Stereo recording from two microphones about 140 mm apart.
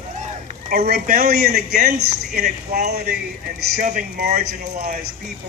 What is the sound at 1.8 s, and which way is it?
Speech, 80° right.